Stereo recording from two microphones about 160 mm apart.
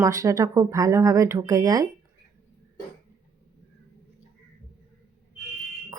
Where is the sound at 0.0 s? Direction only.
20° right (ahead or behind).